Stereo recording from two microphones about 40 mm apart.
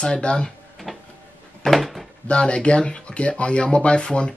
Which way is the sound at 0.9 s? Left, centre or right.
Centre.